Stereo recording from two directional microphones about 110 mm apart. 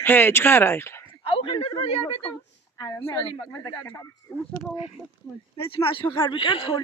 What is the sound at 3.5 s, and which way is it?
Speech, 30° left (ahead or behind).